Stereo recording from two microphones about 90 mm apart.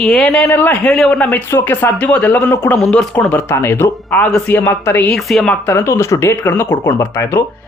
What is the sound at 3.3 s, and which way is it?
A man's voice, 25° left (ahead or behind).